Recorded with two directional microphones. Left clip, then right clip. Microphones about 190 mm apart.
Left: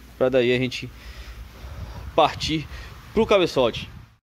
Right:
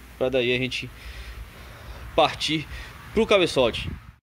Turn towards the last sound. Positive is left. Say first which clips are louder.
# left 1 dB
turn(degrees=10)  # may be behind; listen again after turning